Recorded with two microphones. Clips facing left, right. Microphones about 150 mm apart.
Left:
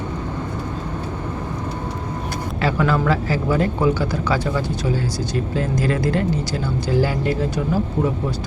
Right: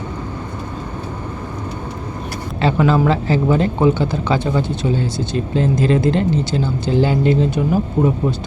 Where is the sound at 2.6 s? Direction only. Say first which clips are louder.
Right 5 dB; 25° right (ahead or behind).